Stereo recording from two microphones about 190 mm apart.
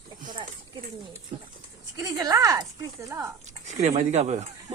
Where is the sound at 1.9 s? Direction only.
20° right (ahead or behind).